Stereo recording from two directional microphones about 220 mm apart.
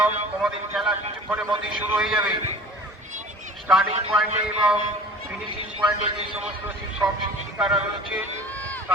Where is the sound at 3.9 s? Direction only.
25° right (ahead or behind).